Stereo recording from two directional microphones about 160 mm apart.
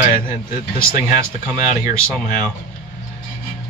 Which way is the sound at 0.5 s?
55° left (ahead or behind).